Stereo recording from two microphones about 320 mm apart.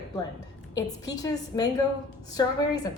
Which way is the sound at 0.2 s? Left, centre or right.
Centre.